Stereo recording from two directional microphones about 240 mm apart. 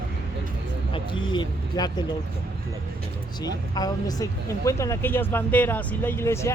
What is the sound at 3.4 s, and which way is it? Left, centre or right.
Speech, centre.